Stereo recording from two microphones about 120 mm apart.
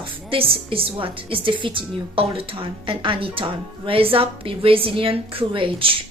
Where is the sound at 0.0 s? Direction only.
50° right (ahead or behind).